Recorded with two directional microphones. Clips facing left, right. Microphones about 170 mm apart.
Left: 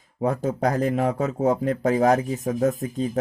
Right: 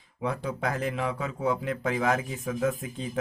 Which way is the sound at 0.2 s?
45° left (ahead or behind).